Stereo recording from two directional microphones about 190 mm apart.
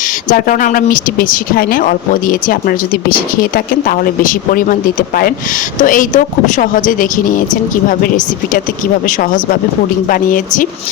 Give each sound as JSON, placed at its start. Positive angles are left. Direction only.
{"t": 0.3, "sound": "speech", "side_deg": 45}